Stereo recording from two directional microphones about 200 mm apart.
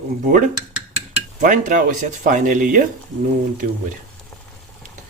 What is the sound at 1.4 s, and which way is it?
Cutlery, 40° right (ahead or behind).